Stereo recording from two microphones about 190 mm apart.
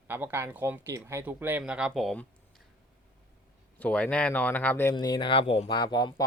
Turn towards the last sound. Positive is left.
turn(degrees=20)  # may be behind; listen again after turning